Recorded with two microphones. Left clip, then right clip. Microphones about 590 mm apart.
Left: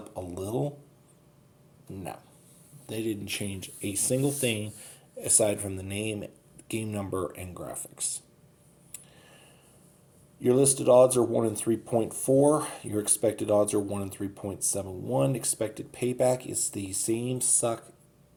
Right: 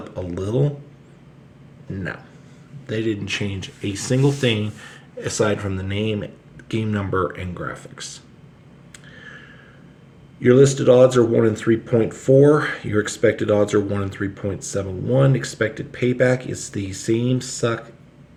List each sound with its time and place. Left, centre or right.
0.2 s a sound: left
2.8 s speech: left
10.4 s speech: left